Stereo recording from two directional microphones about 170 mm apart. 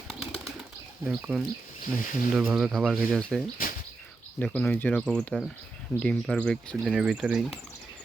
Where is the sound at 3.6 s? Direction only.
55° left (ahead or behind).